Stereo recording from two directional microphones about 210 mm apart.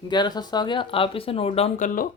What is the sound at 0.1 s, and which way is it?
Speech, 20° left (ahead or behind).